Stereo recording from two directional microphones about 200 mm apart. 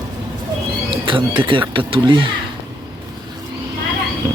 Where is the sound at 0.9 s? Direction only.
25° right (ahead or behind).